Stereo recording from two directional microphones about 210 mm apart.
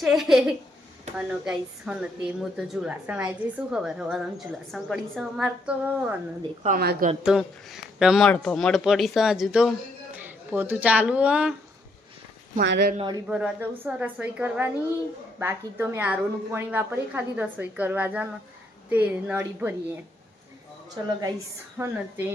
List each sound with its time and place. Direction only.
0.0 s speech: centre (ahead or behind)
6.7 s speech: 45° right (ahead or behind)
7.2 s a woman's voice: centre (ahead or behind)
12.5 s speech: 50° right (ahead or behind)
13.2 s a woman's voice: 5° right (ahead or behind)
20.9 s a woman's voice: 15° right (ahead or behind)